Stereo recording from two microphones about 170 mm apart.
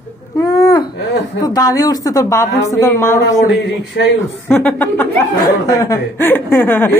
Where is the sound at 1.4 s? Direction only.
20° left (ahead or behind).